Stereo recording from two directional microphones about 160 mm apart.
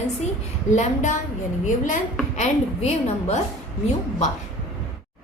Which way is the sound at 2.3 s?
45° left (ahead or behind).